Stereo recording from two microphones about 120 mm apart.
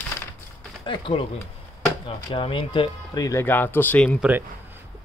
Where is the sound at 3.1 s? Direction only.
30° left (ahead or behind).